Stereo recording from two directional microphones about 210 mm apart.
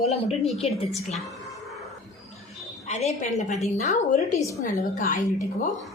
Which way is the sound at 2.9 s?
30° left (ahead or behind).